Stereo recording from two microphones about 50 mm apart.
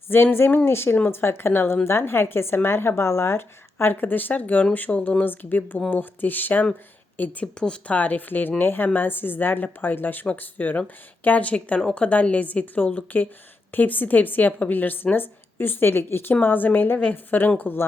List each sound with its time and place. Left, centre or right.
0.1 s a woman's voice: left
5.2 s a woman's voice: left
7.4 s speech: centre
7.9 s a woman's voice: left